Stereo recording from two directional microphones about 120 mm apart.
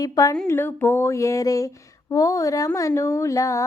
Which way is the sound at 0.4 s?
20° left (ahead or behind).